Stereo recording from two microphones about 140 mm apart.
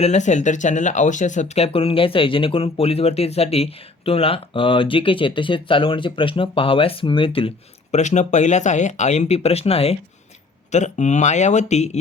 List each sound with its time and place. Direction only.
0.0 s speech: 55° left (ahead or behind)